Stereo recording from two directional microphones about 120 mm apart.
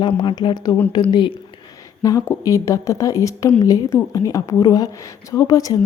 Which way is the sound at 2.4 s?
25° left (ahead or behind).